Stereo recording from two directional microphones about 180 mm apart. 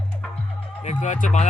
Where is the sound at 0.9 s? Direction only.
45° left (ahead or behind).